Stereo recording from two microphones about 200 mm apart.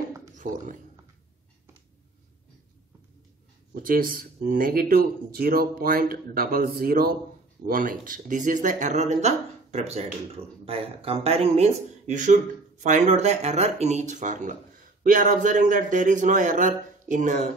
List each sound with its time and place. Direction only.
3.7 s speech: 45° right (ahead or behind)